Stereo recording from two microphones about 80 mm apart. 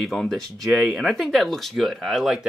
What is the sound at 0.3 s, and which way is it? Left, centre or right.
Speech, centre.